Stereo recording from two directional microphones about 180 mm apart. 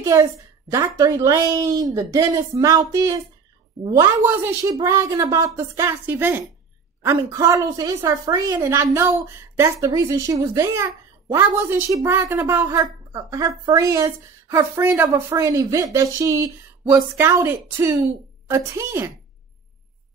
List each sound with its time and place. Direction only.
0.0 s a woman's voice: 15° right (ahead or behind)
4.2 s a woman's voice: 15° right (ahead or behind)